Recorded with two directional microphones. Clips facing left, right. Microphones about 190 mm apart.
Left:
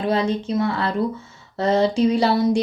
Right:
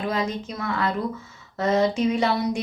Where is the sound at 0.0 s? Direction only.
30° left (ahead or behind).